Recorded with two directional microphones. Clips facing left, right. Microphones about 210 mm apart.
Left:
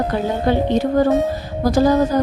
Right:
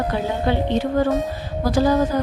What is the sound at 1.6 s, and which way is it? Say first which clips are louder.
Speech: left 3 dB; 40° left (ahead or behind).